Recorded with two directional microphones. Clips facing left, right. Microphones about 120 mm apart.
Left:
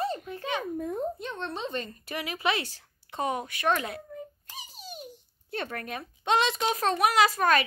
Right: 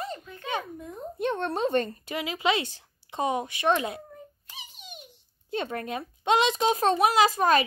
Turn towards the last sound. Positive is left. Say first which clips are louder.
# right 2 dB
turn(degrees=-30)  # may be behind; listen again after turning